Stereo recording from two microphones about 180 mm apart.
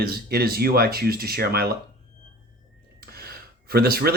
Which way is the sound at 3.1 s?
60° right (ahead or behind).